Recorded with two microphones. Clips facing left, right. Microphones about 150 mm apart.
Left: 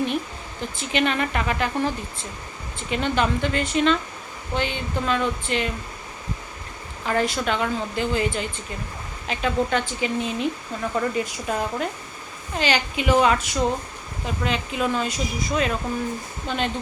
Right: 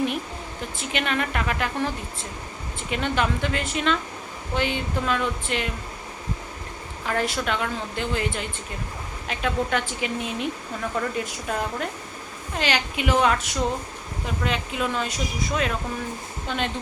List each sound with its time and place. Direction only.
0.8 s speech: centre (ahead or behind)
2.9 s speech: centre (ahead or behind)
7.0 s speech: centre (ahead or behind)